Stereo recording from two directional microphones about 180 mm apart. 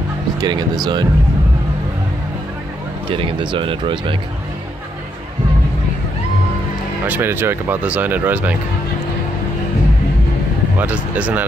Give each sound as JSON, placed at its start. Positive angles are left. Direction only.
{"t": 0.4, "sound": "speech", "side_deg": -25}
{"t": 3.1, "sound": "speech", "side_deg": -30}
{"t": 7.1, "sound": "speech", "side_deg": -10}
{"t": 10.8, "sound": "speech", "side_deg": -10}